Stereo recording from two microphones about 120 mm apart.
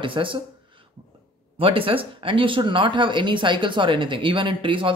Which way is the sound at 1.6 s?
50° right (ahead or behind).